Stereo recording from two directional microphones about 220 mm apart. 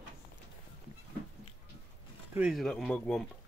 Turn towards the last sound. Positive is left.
turn(degrees=0)  # may be behind; listen again after turning